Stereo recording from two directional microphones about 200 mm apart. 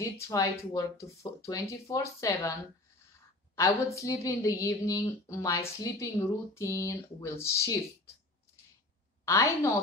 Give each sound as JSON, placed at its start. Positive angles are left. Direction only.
{"t": 0.0, "sound": "speech", "side_deg": 15}
{"t": 3.5, "sound": "speech", "side_deg": 15}
{"t": 9.2, "sound": "a woman's voice", "side_deg": 15}